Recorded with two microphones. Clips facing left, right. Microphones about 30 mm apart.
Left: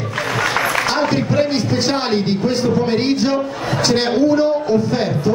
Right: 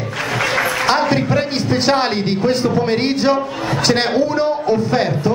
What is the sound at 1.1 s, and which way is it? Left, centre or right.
A man's voice, centre.